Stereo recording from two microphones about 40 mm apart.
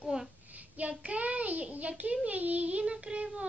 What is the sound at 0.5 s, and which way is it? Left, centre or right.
Child singing, right.